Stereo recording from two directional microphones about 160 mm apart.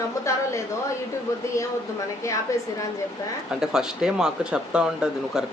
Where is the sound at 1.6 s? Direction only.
20° left (ahead or behind).